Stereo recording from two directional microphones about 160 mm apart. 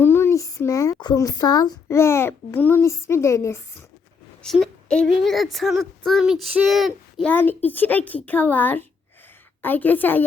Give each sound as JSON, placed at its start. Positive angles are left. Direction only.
{"t": 0.0, "sound": "speech", "side_deg": 15}
{"t": 4.4, "sound": "speech", "side_deg": 0}
{"t": 7.3, "sound": "a child's voice", "side_deg": 10}